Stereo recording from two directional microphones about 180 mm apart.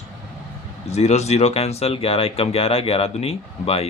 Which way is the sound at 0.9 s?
35° left (ahead or behind).